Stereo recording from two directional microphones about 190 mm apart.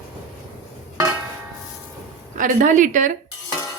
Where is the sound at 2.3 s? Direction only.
45° right (ahead or behind).